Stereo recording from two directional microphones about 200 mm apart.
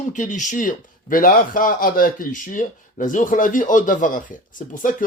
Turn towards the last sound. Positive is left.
turn(degrees=40)  # may be behind; listen again after turning